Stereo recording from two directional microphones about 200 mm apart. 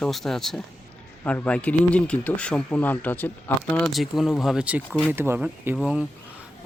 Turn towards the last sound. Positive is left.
turn(degrees=-5)  # may be behind; listen again after turning